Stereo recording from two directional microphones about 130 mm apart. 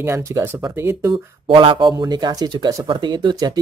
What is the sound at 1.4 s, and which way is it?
Speech, 40° right (ahead or behind).